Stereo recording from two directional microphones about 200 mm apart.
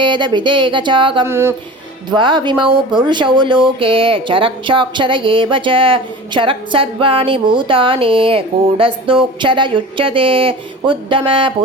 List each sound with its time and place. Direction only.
0.0 s speech: 25° right (ahead or behind)
1.2 s a sound: 15° right (ahead or behind)
2.0 s speech: 25° right (ahead or behind)